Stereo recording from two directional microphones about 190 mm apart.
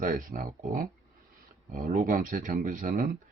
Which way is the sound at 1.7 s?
35° right (ahead or behind).